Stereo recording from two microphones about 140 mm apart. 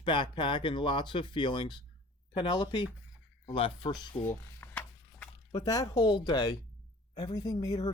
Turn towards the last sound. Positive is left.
turn(degrees=30)  # may be behind; listen again after turning